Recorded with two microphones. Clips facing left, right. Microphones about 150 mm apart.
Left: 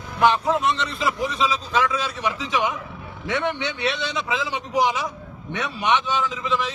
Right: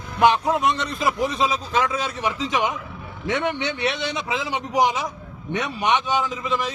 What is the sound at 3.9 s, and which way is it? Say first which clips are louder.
A man's voice: even; 20° right (ahead or behind).